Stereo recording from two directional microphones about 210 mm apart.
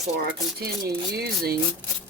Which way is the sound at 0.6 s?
50° right (ahead or behind).